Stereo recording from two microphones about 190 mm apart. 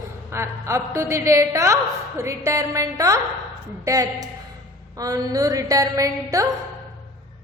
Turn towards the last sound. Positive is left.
turn(degrees=-15)  # may be behind; listen again after turning